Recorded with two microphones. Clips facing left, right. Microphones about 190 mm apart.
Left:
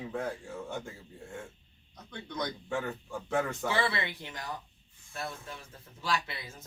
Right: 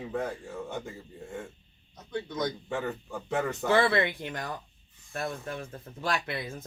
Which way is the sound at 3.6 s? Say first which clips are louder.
Right 7 dB; 55° right (ahead or behind).